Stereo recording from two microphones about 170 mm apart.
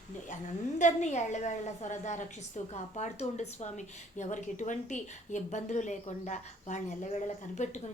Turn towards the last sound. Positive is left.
turn(degrees=45)  # may be behind; listen again after turning